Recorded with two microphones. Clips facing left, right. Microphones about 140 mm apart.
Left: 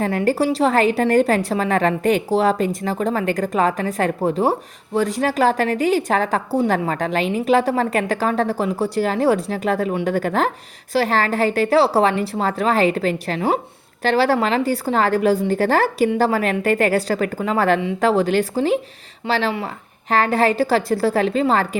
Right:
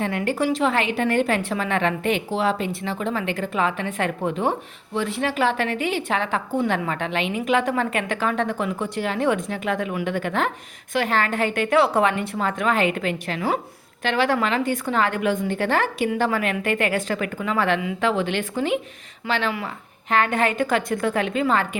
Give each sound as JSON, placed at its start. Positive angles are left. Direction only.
{"t": 0.0, "sound": "a woman's voice", "side_deg": 35}